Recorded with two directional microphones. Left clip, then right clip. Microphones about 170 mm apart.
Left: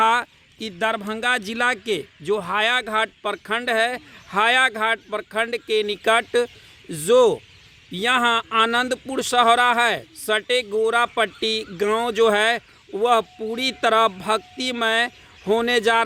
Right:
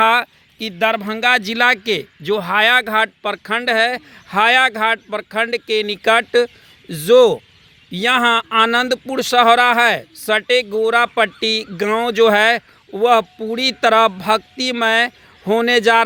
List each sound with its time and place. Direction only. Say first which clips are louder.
0.0 s speech: right 5 dB; 15° right (ahead or behind)